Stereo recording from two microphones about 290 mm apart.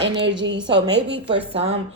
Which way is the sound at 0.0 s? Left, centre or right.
Right.